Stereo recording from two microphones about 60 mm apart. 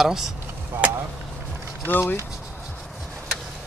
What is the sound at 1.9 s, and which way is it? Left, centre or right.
Speech, left.